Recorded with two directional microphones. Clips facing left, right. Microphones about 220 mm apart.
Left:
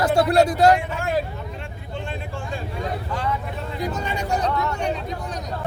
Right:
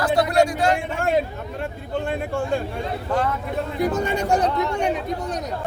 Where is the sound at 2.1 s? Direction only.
60° right (ahead or behind).